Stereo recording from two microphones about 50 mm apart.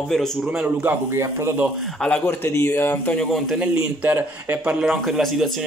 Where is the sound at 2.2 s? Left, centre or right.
Left.